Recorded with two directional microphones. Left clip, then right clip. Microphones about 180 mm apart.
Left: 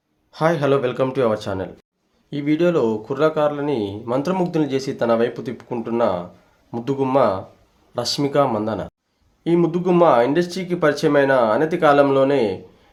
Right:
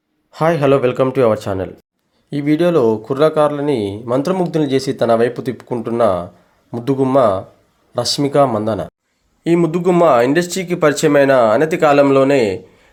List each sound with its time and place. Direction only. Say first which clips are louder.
0.3 s speech: right 5 dB; 25° right (ahead or behind)